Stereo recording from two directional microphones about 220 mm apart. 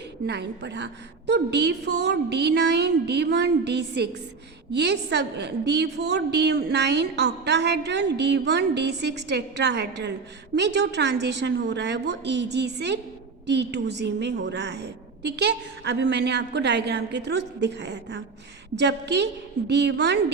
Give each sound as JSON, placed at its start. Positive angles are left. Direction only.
{"t": 0.3, "sound": "a woman's voice", "side_deg": -50}